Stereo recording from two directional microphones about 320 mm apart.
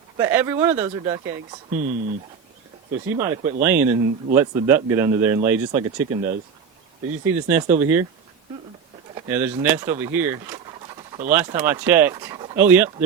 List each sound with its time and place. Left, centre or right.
0.2 s speech: centre
1.7 s speech: right
3.1 s speech: centre
7.4 s speech: centre
9.1 s speech: centre